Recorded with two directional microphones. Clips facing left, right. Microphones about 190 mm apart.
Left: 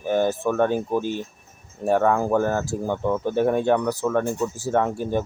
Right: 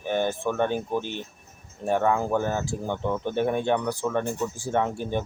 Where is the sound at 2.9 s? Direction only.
5° left (ahead or behind).